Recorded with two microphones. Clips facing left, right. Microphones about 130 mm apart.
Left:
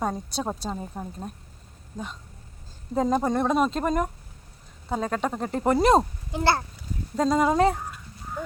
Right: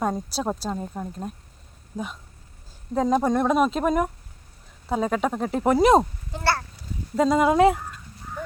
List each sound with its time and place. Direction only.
0.0 s speech: centre (ahead or behind)
2.9 s speech: centre (ahead or behind)
6.3 s a child's voice: 20° left (ahead or behind)
7.2 s speech: 5° right (ahead or behind)